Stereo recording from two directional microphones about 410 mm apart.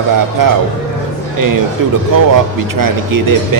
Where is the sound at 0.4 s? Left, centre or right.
Right.